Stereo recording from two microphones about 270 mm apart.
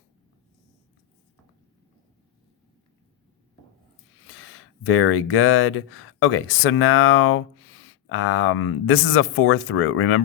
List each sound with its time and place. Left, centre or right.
4.3 s speech: left